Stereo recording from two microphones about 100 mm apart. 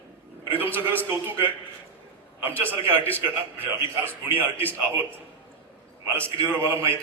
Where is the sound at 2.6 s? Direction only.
15° left (ahead or behind).